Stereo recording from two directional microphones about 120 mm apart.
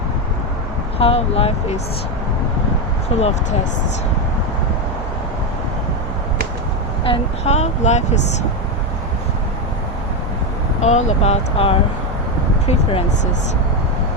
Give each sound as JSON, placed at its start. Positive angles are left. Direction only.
{"t": 0.9, "sound": "speech", "side_deg": 55}
{"t": 3.1, "sound": "speech", "side_deg": 55}
{"t": 7.0, "sound": "speech", "side_deg": 50}
{"t": 7.5, "sound": "speech", "side_deg": 70}
{"t": 10.8, "sound": "speech", "side_deg": 75}